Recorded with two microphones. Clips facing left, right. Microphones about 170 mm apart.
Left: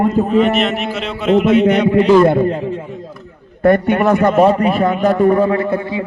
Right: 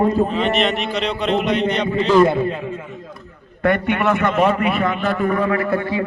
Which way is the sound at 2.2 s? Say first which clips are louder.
Left 6 dB; 50° left (ahead or behind).